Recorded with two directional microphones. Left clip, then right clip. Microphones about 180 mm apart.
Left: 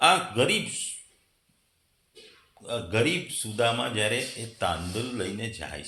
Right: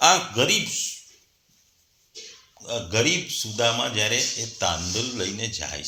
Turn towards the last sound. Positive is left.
turn(degrees=-15)  # may be behind; listen again after turning